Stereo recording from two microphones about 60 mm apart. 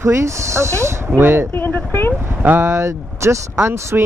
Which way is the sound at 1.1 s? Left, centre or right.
Right.